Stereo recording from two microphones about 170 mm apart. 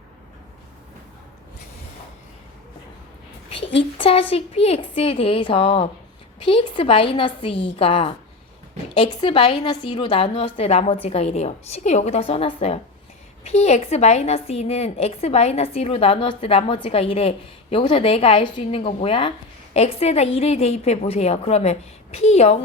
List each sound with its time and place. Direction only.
3.9 s a woman's voice: 30° left (ahead or behind)